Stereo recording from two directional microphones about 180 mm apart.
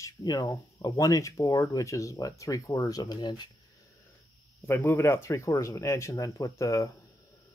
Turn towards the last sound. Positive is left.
turn(degrees=15)  # may be behind; listen again after turning